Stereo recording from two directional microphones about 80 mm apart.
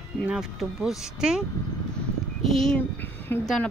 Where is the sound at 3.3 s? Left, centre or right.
Left.